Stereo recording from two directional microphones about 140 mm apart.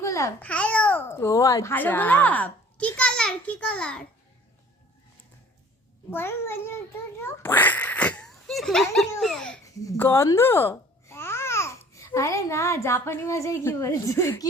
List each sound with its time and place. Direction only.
0.0 s babbling: 20° left (ahead or behind)
0.4 s a child's voice: 10° left (ahead or behind)
6.1 s a child's voice: 15° left (ahead or behind)
9.6 s a child's voice: 20° left (ahead or behind)